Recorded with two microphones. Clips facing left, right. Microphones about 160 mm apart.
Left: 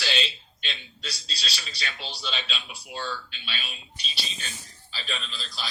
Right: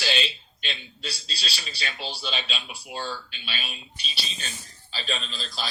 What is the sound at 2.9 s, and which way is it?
Speech, 35° right (ahead or behind).